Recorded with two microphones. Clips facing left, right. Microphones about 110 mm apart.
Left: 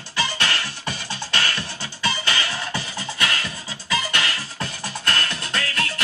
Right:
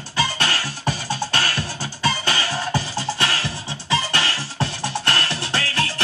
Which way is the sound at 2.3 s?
35° right (ahead or behind).